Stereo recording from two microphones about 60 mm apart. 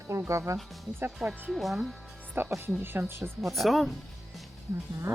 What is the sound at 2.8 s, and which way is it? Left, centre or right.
Speech, right.